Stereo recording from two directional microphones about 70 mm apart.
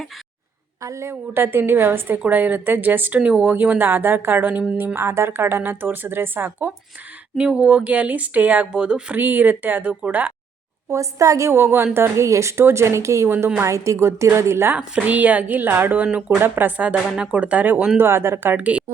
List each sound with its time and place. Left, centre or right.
0.8 s speech: right
1.3 s speech: right
4.9 s speech: right
7.3 s speech: centre
10.8 s speech: right
13.2 s speech: right
13.7 s speech: right
15.0 s speech: right
18.5 s speech: centre